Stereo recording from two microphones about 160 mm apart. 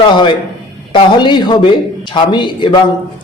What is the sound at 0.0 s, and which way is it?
A man's voice, 30° left (ahead or behind).